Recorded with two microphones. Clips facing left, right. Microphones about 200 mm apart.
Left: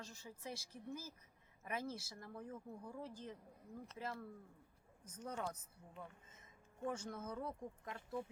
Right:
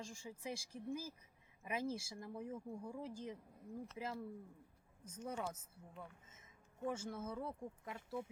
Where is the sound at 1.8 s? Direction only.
25° right (ahead or behind).